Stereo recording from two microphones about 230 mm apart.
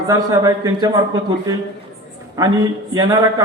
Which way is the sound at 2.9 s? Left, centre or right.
Centre.